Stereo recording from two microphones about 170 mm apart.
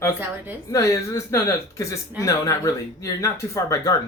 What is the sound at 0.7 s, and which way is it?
Speech, 20° left (ahead or behind).